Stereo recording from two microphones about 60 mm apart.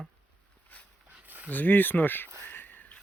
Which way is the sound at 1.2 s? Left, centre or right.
Right.